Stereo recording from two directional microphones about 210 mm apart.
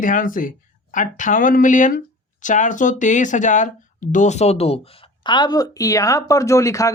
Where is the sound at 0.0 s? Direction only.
40° left (ahead or behind).